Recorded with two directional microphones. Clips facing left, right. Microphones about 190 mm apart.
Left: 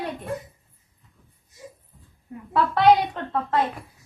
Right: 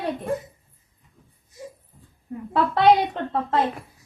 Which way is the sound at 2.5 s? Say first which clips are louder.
Even; 25° right (ahead or behind).